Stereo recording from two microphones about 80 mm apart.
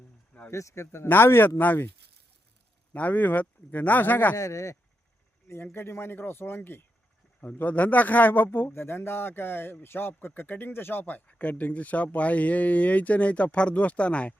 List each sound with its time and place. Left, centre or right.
0.5 s speech: left
2.9 s speech: left
4.4 s speech: left
5.7 s speech: left